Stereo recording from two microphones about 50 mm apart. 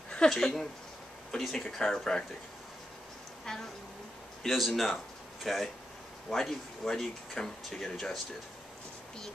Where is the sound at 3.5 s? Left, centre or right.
Centre.